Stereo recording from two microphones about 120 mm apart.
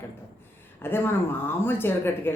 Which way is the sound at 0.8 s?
20° left (ahead or behind).